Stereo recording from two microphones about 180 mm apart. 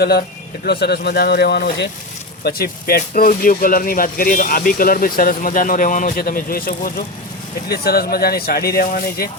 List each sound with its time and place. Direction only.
0.6 s speech: 65° left (ahead or behind)